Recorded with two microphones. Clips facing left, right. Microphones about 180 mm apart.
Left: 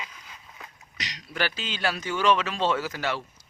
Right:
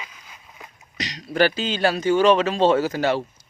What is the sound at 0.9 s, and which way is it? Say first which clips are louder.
Speech: right 11 dB; 35° right (ahead or behind).